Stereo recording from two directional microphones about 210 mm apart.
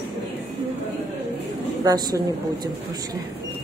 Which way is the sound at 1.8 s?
20° right (ahead or behind).